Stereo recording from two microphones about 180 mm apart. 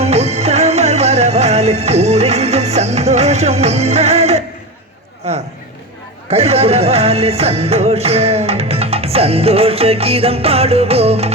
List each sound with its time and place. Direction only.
0.0 s music: 35° right (ahead or behind)
5.2 s a sound: 35° right (ahead or behind)
6.3 s music: 35° right (ahead or behind)